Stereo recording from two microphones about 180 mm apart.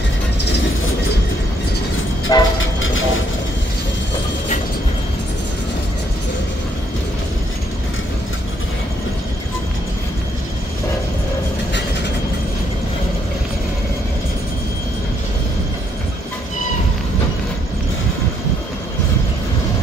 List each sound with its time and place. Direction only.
2.3 s train: 20° left (ahead or behind)
2.6 s train: 90° left